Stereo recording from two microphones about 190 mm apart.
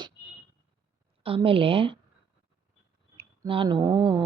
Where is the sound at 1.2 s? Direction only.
30° right (ahead or behind).